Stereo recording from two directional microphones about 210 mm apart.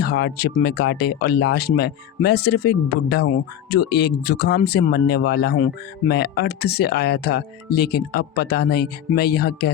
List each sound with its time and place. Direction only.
0.0 s speech: 50° left (ahead or behind)